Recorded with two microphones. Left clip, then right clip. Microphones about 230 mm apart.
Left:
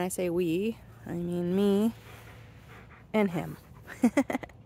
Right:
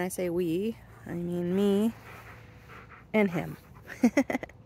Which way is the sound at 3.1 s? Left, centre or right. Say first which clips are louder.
Right 1 dB; centre.